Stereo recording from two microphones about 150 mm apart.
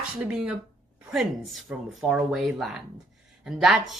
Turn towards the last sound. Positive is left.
turn(degrees=0)  # may be behind; listen again after turning